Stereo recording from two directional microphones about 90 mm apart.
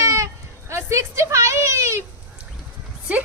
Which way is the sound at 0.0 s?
35° right (ahead or behind).